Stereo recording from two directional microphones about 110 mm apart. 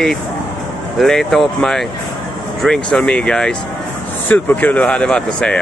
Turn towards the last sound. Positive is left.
turn(degrees=10)  # may be behind; listen again after turning